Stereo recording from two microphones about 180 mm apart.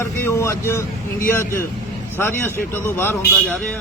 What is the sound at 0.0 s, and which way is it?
Music, 15° left (ahead or behind).